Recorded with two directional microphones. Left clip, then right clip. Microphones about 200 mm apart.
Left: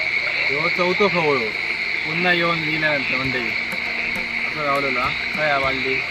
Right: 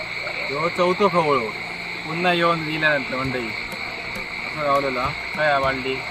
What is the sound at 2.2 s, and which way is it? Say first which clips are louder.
Speech: right 1 dB; 10° left (ahead or behind).